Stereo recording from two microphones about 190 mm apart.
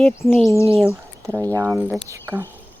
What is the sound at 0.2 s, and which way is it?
Cricket, 15° left (ahead or behind).